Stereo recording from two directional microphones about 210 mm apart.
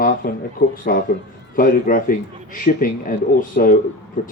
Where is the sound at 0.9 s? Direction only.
45° left (ahead or behind).